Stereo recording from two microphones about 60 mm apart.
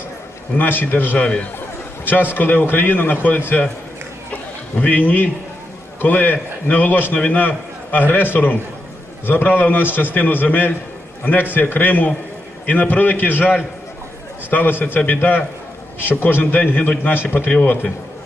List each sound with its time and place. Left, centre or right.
0.5 s a man's voice: left
4.8 s a man's voice: left